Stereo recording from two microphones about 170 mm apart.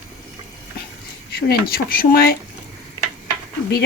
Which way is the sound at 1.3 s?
65° left (ahead or behind).